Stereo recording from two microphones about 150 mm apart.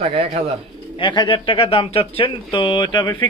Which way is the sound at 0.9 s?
30° left (ahead or behind).